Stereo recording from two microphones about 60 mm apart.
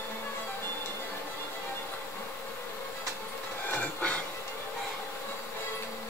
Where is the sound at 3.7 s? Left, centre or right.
Centre.